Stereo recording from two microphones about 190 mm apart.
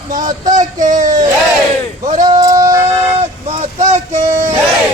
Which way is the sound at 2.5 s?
15° right (ahead or behind).